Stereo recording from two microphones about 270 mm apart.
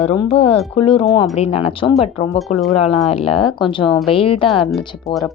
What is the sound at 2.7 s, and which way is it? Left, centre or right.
A woman's voice, left.